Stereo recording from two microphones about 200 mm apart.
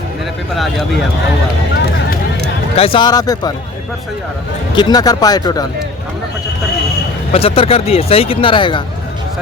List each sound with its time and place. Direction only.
2.7 s speech: 25° left (ahead or behind)
4.7 s speech: 20° left (ahead or behind)
7.3 s speech: 30° left (ahead or behind)